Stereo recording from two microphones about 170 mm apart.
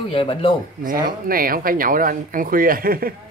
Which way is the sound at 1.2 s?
55° right (ahead or behind).